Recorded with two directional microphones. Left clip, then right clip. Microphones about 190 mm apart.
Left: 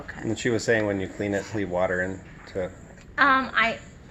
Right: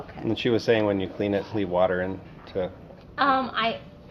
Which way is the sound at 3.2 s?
35° left (ahead or behind).